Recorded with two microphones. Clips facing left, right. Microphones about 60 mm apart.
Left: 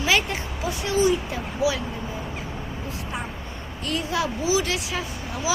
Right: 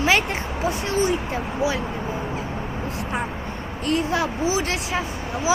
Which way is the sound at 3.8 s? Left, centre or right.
Right.